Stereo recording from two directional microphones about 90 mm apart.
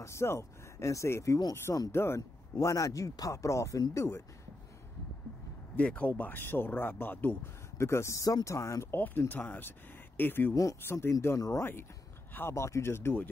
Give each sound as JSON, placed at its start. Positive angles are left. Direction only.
{"t": 0.0, "sound": "speech", "side_deg": 30}
{"t": 2.5, "sound": "speech", "side_deg": 40}
{"t": 5.8, "sound": "speech", "side_deg": 15}
{"t": 7.8, "sound": "speech", "side_deg": 30}
{"t": 8.9, "sound": "speech", "side_deg": 25}
{"t": 10.5, "sound": "speech", "side_deg": 40}
{"t": 10.8, "sound": "speech", "side_deg": 25}